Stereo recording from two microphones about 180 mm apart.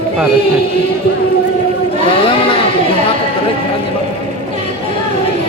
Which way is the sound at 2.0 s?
30° left (ahead or behind).